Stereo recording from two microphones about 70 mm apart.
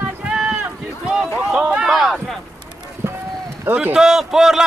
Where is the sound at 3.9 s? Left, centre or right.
Centre.